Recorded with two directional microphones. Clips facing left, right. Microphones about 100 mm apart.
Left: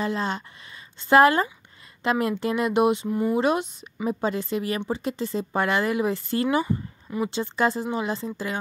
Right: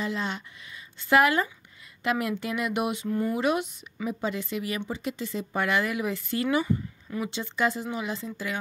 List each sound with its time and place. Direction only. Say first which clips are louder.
0.0 s speech: left 4 dB; 40° left (ahead or behind)
3.1 s speech: left 3 dB; 15° left (ahead or behind)
3.3 s speech: left 3 dB; 30° left (ahead or behind)